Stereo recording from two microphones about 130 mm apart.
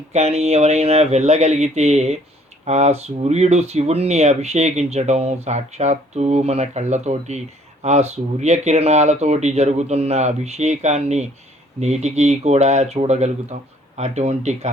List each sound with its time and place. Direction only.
0.1 s speech: 55° right (ahead or behind)